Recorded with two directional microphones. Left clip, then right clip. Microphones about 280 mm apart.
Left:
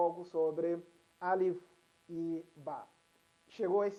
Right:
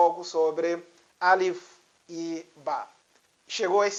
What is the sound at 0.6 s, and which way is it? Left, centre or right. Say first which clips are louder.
Speech: right 8 dB; centre.